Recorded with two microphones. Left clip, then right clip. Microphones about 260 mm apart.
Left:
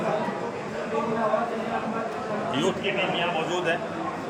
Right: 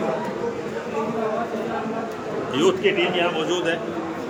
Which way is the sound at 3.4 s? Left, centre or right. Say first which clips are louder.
Right 3 dB; centre.